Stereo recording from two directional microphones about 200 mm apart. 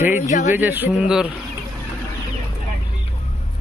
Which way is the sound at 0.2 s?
40° left (ahead or behind).